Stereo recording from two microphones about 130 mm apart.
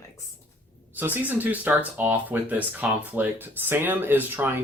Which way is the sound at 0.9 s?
15° right (ahead or behind).